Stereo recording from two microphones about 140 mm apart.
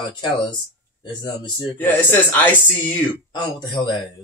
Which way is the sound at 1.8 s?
10° left (ahead or behind).